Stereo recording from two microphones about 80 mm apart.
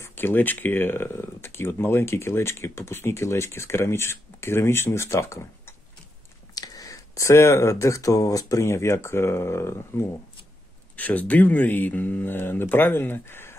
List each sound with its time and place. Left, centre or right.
0.1 s speech: left
6.5 s speech: left
11.0 s speech: centre